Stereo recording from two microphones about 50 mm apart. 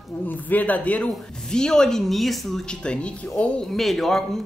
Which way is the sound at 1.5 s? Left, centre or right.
Centre.